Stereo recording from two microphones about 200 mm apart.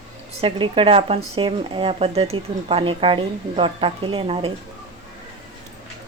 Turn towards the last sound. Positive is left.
turn(degrees=-25)  # may be behind; listen again after turning